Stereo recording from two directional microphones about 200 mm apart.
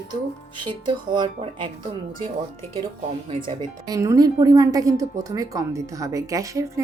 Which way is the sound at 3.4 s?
20° right (ahead or behind).